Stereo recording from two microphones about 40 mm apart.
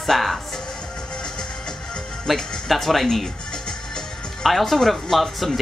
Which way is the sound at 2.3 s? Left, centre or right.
Centre.